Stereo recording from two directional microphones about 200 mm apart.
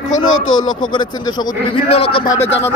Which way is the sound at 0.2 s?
20° left (ahead or behind).